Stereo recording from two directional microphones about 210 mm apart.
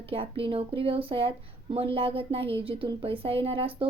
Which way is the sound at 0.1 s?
25° right (ahead or behind).